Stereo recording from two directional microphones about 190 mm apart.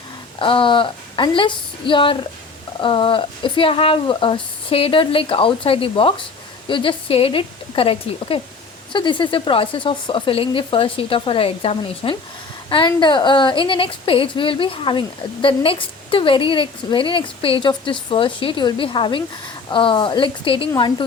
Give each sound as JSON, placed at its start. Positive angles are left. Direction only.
{"t": 0.3, "sound": "a woman's voice", "side_deg": 25}